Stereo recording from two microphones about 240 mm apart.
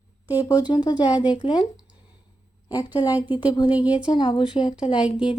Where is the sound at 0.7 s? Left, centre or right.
Centre.